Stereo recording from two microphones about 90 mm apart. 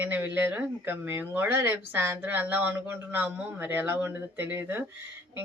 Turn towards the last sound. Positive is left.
turn(degrees=-20)  # may be behind; listen again after turning